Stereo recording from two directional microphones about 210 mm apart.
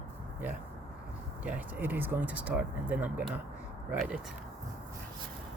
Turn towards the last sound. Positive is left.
turn(degrees=-5)  # may be behind; listen again after turning